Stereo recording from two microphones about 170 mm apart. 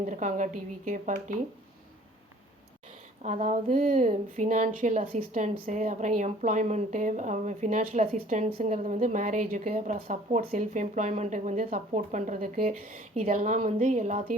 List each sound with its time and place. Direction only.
0.0 s speech: 50° right (ahead or behind)
3.2 s speech: 45° right (ahead or behind)